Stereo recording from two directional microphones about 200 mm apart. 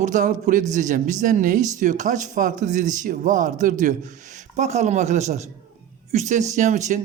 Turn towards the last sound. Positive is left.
turn(degrees=-35)  # may be behind; listen again after turning